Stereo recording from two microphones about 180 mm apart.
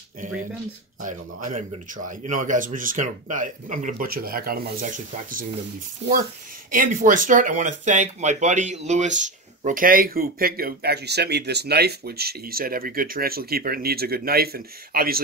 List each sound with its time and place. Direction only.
2.0 s speech: 45° right (ahead or behind)
6.0 s speech: 30° right (ahead or behind)
6.7 s speech: 50° right (ahead or behind)